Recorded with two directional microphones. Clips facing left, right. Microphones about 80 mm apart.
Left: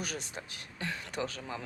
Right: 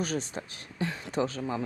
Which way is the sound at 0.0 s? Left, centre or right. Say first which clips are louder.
Right 7 dB; right.